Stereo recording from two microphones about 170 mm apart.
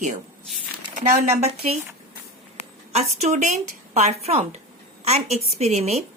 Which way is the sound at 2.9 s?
40° right (ahead or behind).